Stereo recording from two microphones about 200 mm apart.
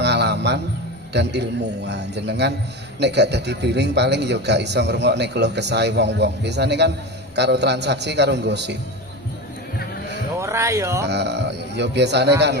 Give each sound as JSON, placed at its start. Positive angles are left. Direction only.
{"t": 0.0, "sound": "music", "side_deg": -60}
{"t": 1.1, "sound": "a man's voice", "side_deg": -60}
{"t": 10.3, "sound": "speech", "side_deg": -15}
{"t": 11.0, "sound": "a man's voice", "side_deg": -55}